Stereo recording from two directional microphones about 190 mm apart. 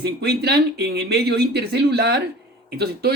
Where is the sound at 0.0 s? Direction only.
60° right (ahead or behind).